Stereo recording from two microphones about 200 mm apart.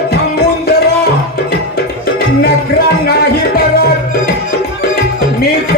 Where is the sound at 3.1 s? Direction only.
50° left (ahead or behind).